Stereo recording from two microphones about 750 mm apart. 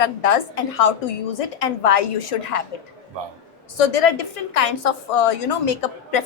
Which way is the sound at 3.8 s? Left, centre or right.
Left.